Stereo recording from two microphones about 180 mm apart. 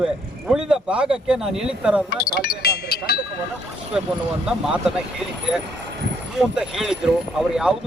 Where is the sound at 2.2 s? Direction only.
60° left (ahead or behind).